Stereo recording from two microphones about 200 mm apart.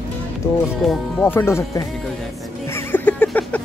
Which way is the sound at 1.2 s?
10° left (ahead or behind).